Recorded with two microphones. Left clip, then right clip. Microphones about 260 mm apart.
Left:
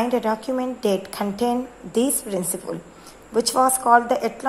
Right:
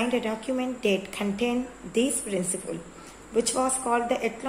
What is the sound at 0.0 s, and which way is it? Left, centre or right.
A woman's voice, left.